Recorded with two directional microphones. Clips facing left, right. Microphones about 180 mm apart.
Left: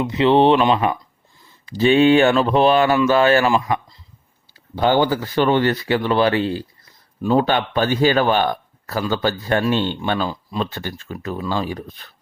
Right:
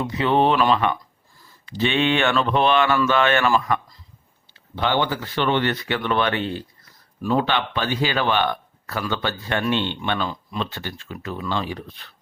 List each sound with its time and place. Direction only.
0.2 s speech: 30° left (ahead or behind)
4.7 s speech: 40° left (ahead or behind)